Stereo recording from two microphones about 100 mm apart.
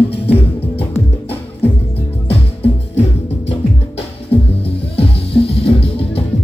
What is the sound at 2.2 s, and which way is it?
Music, 90° left.